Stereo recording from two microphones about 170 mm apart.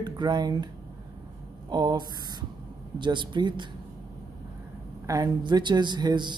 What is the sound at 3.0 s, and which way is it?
Speech, 25° right (ahead or behind).